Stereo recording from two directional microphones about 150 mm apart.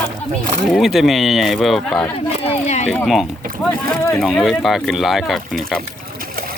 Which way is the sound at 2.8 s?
5° left (ahead or behind).